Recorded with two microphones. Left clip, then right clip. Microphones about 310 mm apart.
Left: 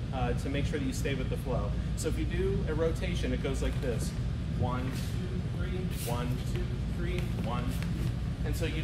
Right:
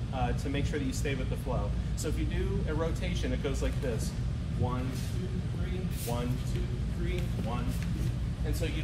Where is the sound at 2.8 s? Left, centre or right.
Centre.